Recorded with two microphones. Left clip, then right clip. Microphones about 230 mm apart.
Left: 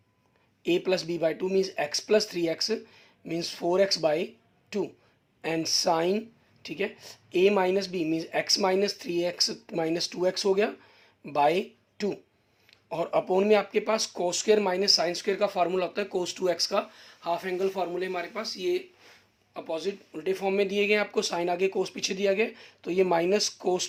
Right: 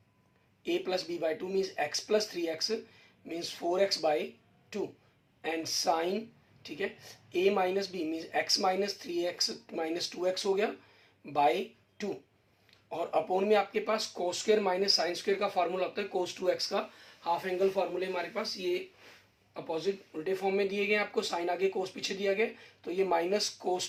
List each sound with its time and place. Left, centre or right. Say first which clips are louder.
0.6 s speech: left 6 dB; left
17.2 s speech: left 1 dB; left